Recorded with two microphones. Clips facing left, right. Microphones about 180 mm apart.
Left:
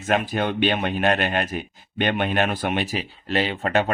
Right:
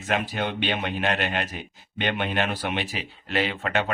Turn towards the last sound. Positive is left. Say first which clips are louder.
# left 4 dB
turn(degrees=35)  # may be behind; listen again after turning